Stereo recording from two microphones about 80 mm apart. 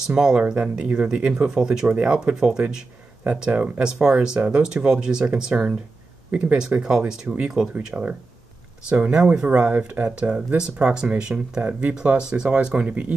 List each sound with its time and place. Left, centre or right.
0.1 s speech: centre